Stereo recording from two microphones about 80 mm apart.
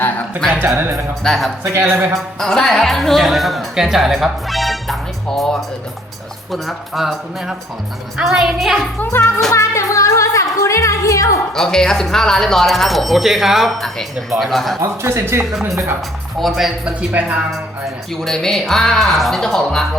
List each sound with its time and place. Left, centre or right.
0.7 s a man's voice: right
1.2 s speech: centre
1.6 s a man's voice: right
2.1 s speech: centre
9.0 s music: left
11.5 s speech: centre
14.8 s a man's voice: right
16.4 s speech: centre
17.0 s speech: centre
18.2 s speech: centre